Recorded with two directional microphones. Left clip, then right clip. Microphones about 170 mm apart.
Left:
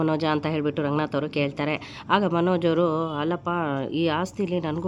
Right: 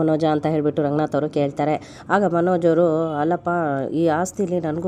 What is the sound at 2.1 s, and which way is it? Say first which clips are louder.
Speech: right 4 dB; 15° left (ahead or behind).